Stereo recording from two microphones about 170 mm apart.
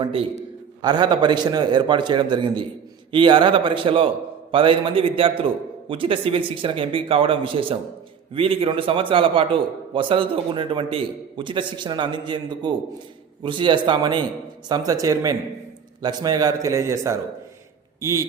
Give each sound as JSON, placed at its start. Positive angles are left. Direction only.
{"t": 0.0, "sound": "a man's voice", "side_deg": -30}